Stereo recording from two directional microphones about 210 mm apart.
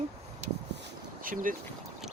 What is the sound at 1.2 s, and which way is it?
Speech, 40° right (ahead or behind).